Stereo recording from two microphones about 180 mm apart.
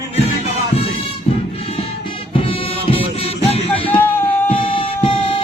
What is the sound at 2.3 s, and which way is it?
Music, 30° left (ahead or behind).